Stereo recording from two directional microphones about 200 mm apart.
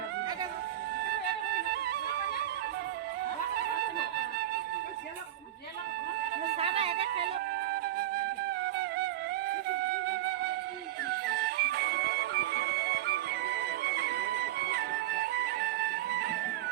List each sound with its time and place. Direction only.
1.5 s music: 50° right (ahead or behind)
6.6 s music: 30° right (ahead or behind)
9.7 s flute: 55° right (ahead or behind)
11.1 s music: 50° right (ahead or behind)